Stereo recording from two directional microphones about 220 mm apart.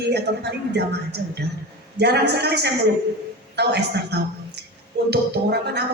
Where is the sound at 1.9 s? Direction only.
50° right (ahead or behind).